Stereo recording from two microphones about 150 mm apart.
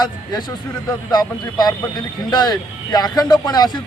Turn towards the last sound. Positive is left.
turn(degrees=25)  # may be behind; listen again after turning